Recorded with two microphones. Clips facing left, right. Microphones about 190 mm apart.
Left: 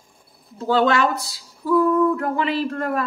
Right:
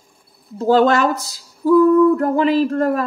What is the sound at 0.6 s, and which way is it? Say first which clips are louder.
Speech: right 5 dB; 45° right (ahead or behind).